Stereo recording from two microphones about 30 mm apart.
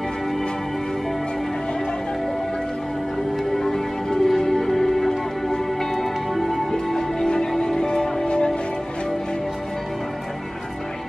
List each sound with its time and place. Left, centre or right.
3.5 s music: centre